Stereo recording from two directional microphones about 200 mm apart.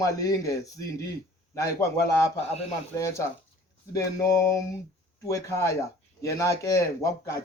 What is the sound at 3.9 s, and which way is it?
Speech, 15° left (ahead or behind).